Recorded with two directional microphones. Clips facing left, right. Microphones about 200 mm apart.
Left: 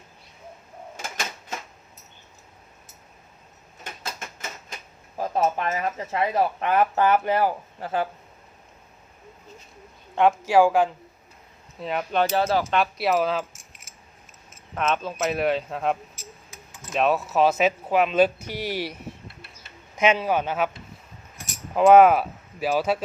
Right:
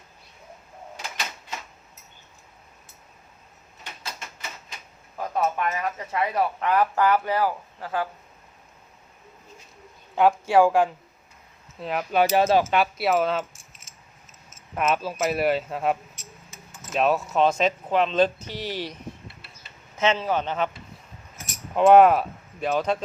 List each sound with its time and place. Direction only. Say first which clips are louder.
3.8 s typewriter: left 3 dB; 50° left (ahead or behind)
5.1 s speech: left 2 dB; 30° left (ahead or behind)
10.2 s speech: even; centre (ahead or behind)
12.2 s speech: right 4 dB; 20° right (ahead or behind)
12.7 s speech: even; centre (ahead or behind)
14.8 s speech: right 1 dB; 5° right (ahead or behind); by 18.9 s 10° left (ahead or behind)
20.0 s speech: left 2 dB; 10° left (ahead or behind)
21.8 s speech: left 1 dB; centre (ahead or behind)